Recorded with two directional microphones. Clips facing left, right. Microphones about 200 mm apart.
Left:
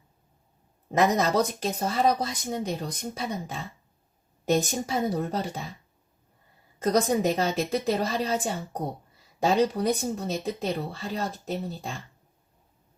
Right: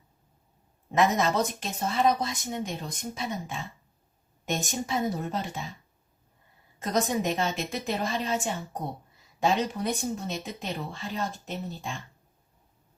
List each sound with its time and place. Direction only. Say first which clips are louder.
0.9 s speech: left 2 dB; 40° left (ahead or behind)
6.8 s speech: left 4 dB; 35° left (ahead or behind)